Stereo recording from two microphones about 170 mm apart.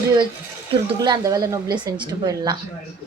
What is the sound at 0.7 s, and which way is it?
Speech, 25° right (ahead or behind).